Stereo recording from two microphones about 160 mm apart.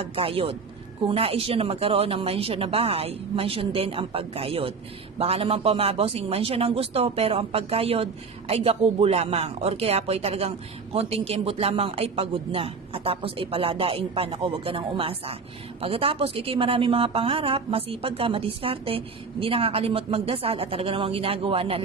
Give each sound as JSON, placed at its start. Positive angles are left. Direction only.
{"t": 0.0, "sound": "a man's voice", "side_deg": -35}